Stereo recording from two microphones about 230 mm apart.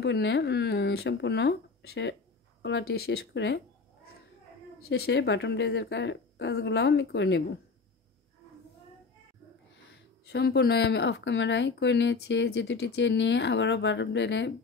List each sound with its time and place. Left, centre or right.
0.0 s speech: left
4.8 s speech: left
9.9 s speech: left